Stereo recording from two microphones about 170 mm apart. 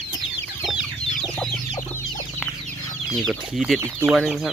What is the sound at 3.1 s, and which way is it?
Speech, centre (ahead or behind).